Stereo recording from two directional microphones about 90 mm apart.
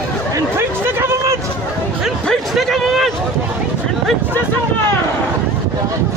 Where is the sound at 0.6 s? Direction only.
30° right (ahead or behind).